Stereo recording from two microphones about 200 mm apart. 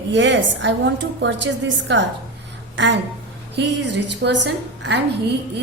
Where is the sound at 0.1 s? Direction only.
60° right (ahead or behind).